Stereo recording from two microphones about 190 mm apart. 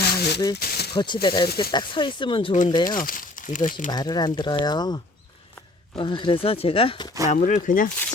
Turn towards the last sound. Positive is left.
turn(degrees=45)  # may be behind; listen again after turning